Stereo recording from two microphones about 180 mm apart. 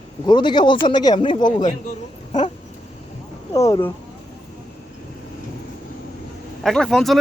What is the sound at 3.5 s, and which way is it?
Speech, 20° left (ahead or behind).